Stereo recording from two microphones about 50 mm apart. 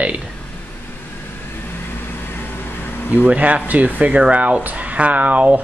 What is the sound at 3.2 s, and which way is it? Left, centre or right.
Speech, right.